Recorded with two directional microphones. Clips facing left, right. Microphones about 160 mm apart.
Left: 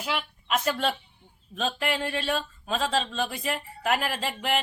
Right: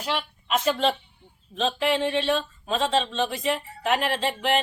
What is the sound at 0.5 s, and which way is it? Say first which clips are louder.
Speech: right 3 dB; centre (ahead or behind).